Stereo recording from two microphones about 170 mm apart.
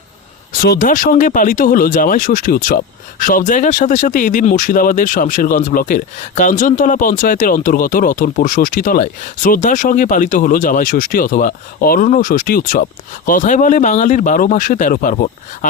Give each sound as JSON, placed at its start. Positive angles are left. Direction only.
{"t": 0.6, "sound": "speech", "side_deg": 55}